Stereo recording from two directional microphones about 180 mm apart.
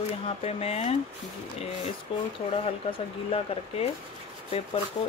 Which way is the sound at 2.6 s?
35° left (ahead or behind).